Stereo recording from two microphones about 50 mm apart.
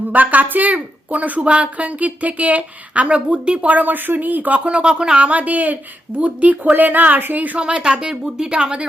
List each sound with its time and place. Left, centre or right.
0.1 s speech: right
7.6 s speech: centre